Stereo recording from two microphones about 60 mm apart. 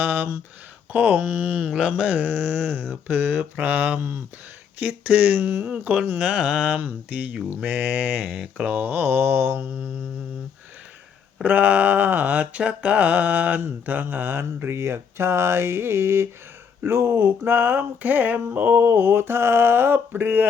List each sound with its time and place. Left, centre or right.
0.0 s speech: right
0.9 s mantra: right
5.4 s mantra: right
6.1 s mantra: right
8.8 s mantra: right
11.4 s mantra: right
18.8 s mantra: right